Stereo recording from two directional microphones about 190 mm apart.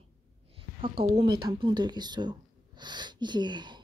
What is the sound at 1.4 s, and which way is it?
A woman's voice, 25° right (ahead or behind).